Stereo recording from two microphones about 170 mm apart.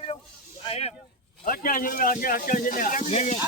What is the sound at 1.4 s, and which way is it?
Speech, 55° left (ahead or behind).